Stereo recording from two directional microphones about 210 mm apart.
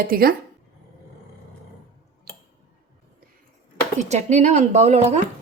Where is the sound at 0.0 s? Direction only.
45° right (ahead or behind).